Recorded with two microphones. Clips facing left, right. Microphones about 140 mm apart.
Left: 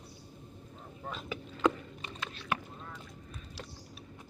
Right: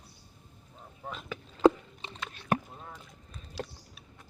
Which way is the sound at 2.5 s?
50° right (ahead or behind).